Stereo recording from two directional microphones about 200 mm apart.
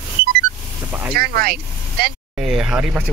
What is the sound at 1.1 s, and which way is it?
Speech, 50° right (ahead or behind).